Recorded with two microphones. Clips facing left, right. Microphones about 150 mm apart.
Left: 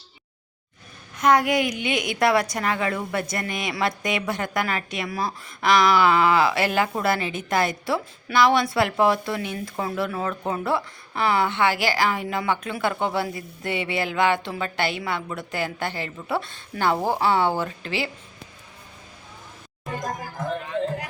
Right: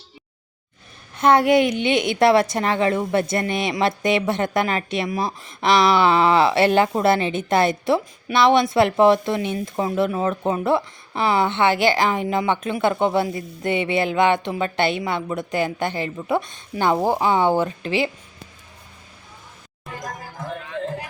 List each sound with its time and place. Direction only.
1.1 s a woman's voice: 30° right (ahead or behind)